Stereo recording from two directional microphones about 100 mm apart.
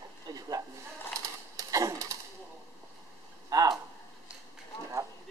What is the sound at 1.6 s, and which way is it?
Typewriter, 35° right (ahead or behind).